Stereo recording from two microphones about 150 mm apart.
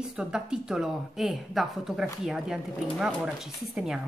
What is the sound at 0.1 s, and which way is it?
A woman's voice, 5° right (ahead or behind).